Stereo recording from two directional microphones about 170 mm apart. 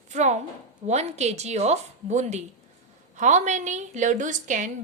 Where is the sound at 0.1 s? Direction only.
45° right (ahead or behind).